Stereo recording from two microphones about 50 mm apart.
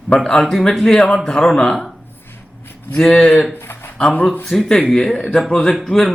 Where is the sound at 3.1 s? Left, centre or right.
Left.